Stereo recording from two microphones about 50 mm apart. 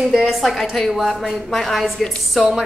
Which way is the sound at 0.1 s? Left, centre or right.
Centre.